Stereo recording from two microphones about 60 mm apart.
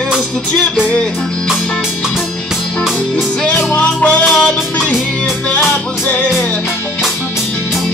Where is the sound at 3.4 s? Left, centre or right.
Left.